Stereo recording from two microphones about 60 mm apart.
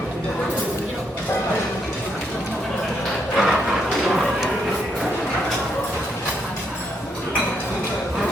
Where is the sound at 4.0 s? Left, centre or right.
Centre.